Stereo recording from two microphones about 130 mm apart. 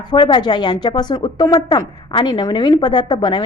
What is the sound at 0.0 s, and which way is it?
A woman's voice, 35° left (ahead or behind).